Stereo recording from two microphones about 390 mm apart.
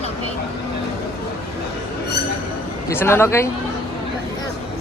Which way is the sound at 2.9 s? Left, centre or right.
Centre.